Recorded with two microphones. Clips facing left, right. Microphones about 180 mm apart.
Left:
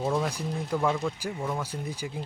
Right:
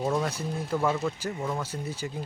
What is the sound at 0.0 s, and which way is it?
Speech, centre (ahead or behind).